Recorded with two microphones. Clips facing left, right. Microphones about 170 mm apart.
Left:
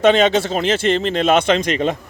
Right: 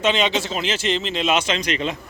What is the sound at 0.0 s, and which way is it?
Speech, 50° left (ahead or behind).